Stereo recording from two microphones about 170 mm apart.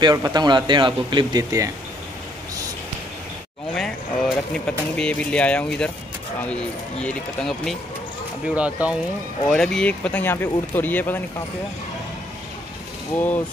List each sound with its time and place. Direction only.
0.0 s speech: 25° right (ahead or behind)
3.7 s speech: 5° left (ahead or behind)
8.5 s speech: 10° right (ahead or behind)
9.5 s speech: 5° left (ahead or behind)
13.1 s speech: 10° left (ahead or behind)